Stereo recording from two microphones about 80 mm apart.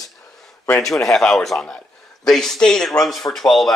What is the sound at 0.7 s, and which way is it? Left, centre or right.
A man's voice, centre.